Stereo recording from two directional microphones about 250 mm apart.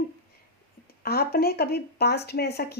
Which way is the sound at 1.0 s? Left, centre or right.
Left.